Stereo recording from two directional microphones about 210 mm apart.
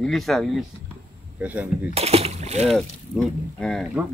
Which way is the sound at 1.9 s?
30° right (ahead or behind).